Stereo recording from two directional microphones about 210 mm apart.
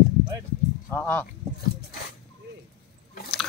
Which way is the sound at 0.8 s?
10° left (ahead or behind).